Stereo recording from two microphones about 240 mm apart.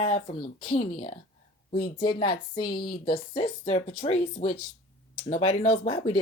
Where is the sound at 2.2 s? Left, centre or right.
Centre.